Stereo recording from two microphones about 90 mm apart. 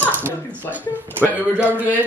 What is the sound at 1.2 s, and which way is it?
Speech, 20° right (ahead or behind).